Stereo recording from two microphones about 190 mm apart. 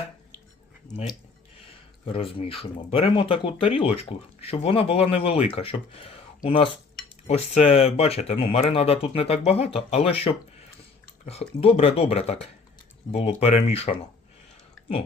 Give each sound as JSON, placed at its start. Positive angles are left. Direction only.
{"t": 2.1, "sound": "speech", "side_deg": 30}
{"t": 7.3, "sound": "speech", "side_deg": 35}